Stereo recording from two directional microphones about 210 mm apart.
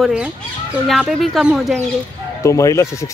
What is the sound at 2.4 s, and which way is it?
Speech, 15° left (ahead or behind).